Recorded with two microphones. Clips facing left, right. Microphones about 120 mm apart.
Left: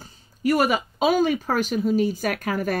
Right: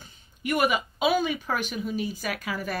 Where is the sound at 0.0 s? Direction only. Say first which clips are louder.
Left 10 dB; 40° left (ahead or behind).